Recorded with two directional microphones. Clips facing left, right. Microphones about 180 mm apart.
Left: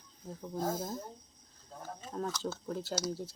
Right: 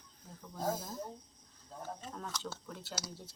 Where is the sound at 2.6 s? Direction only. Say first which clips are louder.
Left 9 dB; 40° left (ahead or behind).